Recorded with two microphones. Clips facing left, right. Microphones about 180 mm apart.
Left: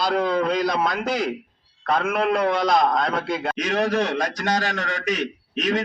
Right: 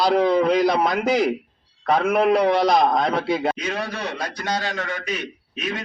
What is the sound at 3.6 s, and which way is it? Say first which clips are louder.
A man's voice: left 6 dB; 80° left.